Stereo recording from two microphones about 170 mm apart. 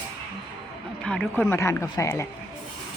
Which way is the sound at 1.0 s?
5° left (ahead or behind).